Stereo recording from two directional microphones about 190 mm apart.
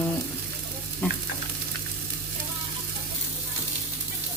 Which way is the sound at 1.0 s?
5° left (ahead or behind).